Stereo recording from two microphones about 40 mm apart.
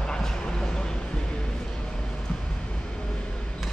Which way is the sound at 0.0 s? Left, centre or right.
Centre.